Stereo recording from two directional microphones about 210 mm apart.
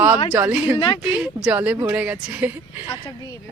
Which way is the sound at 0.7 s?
20° left (ahead or behind).